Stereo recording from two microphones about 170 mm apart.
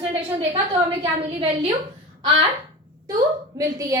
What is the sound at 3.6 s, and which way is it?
Speech, 20° right (ahead or behind).